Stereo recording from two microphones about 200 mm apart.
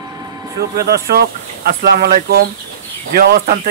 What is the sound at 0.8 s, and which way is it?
Speech, 50° right (ahead or behind).